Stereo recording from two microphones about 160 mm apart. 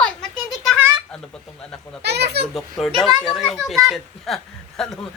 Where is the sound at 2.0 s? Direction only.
90° right.